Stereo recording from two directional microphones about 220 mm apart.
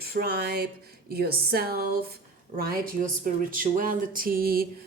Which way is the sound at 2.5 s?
40° right (ahead or behind).